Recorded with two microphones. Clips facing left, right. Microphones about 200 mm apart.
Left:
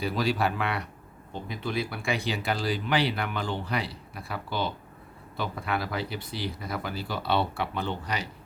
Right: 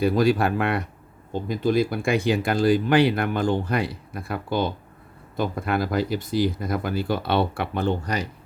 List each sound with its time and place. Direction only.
0.0 s speech: 50° right (ahead or behind)